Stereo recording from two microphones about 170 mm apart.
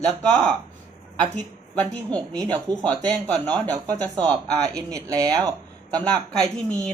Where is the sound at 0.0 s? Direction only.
5° left (ahead or behind).